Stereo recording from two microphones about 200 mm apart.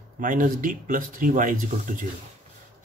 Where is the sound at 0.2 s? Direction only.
40° right (ahead or behind).